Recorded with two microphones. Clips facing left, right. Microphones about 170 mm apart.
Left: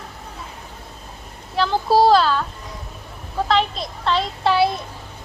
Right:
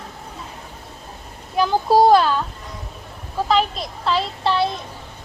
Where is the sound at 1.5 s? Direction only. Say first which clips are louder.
Right 1 dB; 15° right (ahead or behind).